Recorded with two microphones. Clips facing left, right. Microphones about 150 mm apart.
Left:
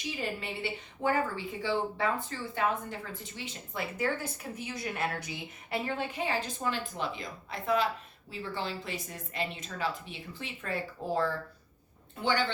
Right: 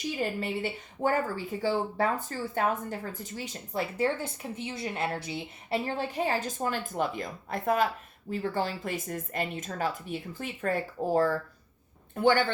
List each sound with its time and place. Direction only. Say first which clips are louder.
0.3 s a woman's voice: right 5 dB; 45° right (ahead or behind)